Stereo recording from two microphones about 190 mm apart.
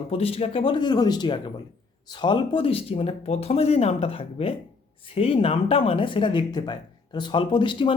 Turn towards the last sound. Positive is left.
turn(degrees=25)  # may be behind; listen again after turning